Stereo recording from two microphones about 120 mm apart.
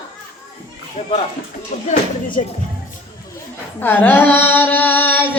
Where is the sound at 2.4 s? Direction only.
70° left (ahead or behind).